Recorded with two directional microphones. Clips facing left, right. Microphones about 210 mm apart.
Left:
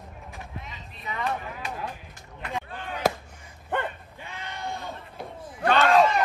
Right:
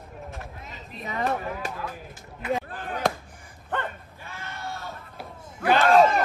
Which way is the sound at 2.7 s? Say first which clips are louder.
Right 2 dB; 45° right (ahead or behind).